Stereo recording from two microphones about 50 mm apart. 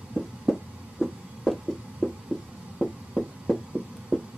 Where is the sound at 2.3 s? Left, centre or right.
Centre.